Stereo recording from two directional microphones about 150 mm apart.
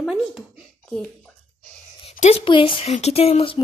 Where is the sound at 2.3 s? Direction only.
35° left (ahead or behind).